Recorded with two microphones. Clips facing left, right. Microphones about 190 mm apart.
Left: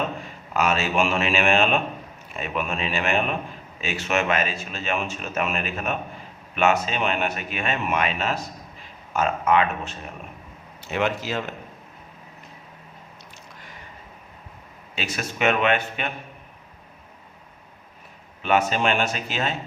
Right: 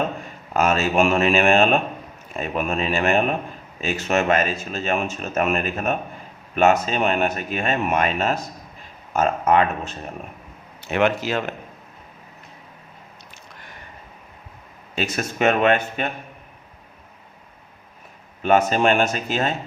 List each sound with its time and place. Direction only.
0.5 s speech: 45° right (ahead or behind)
10.8 s speech: 60° right (ahead or behind)
14.9 s speech: 45° right (ahead or behind)
18.7 s speech: 45° right (ahead or behind)